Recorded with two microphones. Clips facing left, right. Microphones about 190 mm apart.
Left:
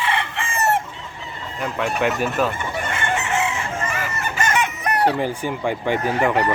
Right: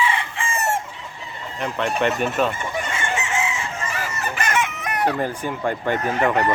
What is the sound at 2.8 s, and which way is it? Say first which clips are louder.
Chicken: left 4 dB; 60° left (ahead or behind).